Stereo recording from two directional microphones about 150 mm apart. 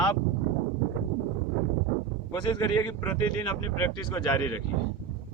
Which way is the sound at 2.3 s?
30° left (ahead or behind).